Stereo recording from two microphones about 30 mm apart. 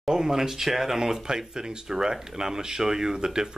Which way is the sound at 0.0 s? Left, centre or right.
Centre.